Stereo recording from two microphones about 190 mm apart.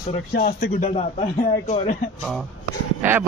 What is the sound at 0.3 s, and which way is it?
Speech, 50° left (ahead or behind).